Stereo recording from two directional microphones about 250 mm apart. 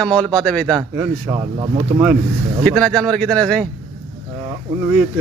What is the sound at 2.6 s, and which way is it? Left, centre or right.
A man's voice, centre.